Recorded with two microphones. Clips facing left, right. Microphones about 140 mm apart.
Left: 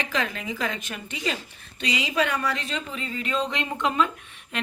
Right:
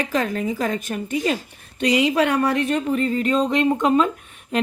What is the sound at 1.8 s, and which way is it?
A woman's voice, 60° right (ahead or behind).